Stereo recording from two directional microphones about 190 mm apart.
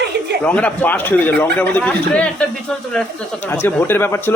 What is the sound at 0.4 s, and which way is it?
Speech, 10° left (ahead or behind).